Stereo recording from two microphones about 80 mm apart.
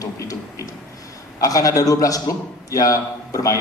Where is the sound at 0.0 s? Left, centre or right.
Left.